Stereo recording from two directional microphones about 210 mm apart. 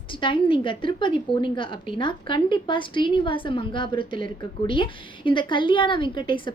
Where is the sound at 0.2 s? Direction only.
25° left (ahead or behind).